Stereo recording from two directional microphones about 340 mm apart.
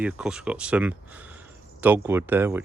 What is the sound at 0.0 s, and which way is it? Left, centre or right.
Speech, centre.